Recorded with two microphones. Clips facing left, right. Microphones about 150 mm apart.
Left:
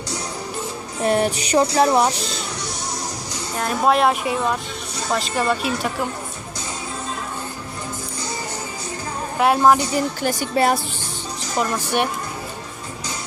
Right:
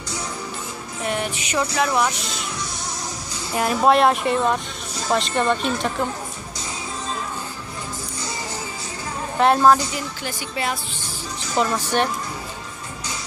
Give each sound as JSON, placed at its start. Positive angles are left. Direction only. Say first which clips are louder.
{"t": 1.0, "sound": "music", "louder": "left 7 dB", "side_deg": 35}
{"t": 3.5, "sound": "a woman's voice", "louder": "right 2 dB", "side_deg": -5}
{"t": 9.4, "sound": "a woman's voice", "louder": "even", "side_deg": 10}
{"t": 9.9, "sound": "speech", "louder": "left 8 dB", "side_deg": 45}
{"t": 11.5, "sound": "a woman's voice", "louder": "right 1 dB", "side_deg": 0}
{"t": 11.8, "sound": "a woman's voice", "louder": "even", "side_deg": 15}